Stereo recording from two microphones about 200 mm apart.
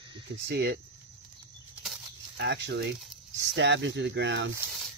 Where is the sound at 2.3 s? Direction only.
60° right (ahead or behind).